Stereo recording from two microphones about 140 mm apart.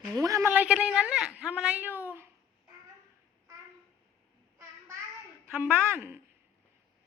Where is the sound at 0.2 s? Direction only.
20° right (ahead or behind).